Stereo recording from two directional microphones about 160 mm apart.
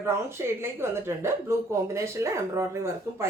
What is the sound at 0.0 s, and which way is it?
A woman's voice, 15° right (ahead or behind).